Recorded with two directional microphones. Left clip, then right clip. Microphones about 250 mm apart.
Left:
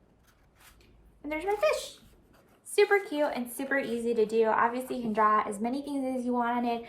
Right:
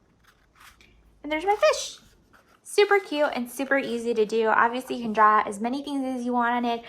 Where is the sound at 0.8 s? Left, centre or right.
Right.